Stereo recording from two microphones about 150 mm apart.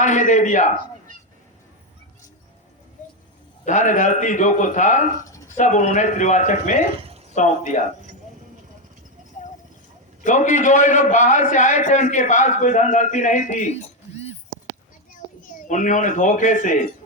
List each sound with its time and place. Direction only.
0.0 s a man's voice: 55° left (ahead or behind)
3.7 s a man's voice: 55° left (ahead or behind)
10.2 s a man's voice: 55° left (ahead or behind)
15.4 s speech: 60° left (ahead or behind)